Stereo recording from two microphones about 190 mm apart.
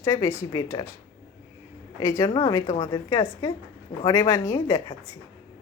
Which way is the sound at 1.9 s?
15° left (ahead or behind).